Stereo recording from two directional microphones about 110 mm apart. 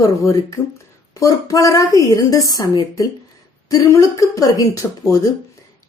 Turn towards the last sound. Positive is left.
turn(degrees=30)  # may be behind; listen again after turning